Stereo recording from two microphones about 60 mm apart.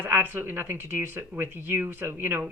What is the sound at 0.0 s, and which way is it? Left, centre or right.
A woman's voice, right.